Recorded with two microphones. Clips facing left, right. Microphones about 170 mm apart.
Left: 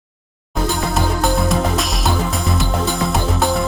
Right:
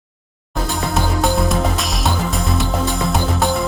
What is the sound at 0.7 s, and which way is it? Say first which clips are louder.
Music: even; centre (ahead or behind).